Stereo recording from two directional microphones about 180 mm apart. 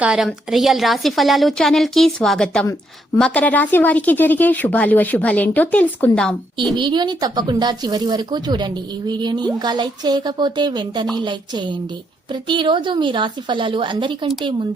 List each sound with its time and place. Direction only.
0.0 s a woman's voice: centre (ahead or behind)
6.7 s speech: 25° right (ahead or behind)